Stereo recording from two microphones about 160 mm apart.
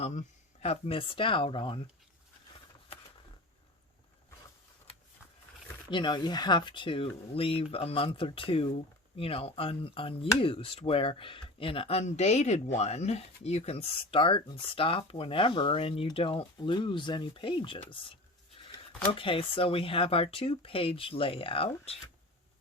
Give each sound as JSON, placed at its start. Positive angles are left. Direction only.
{"t": 0.0, "sound": "speech", "side_deg": 45}
{"t": 5.9, "sound": "speech", "side_deg": 30}
{"t": 19.1, "sound": "speech", "side_deg": 35}